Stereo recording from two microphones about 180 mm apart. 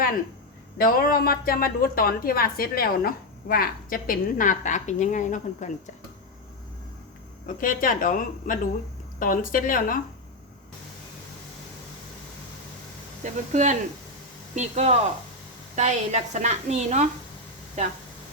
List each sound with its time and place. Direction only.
0.8 s speech: 55° left (ahead or behind)
7.4 s speech: 50° left (ahead or behind)
13.2 s a woman's voice: 40° right (ahead or behind)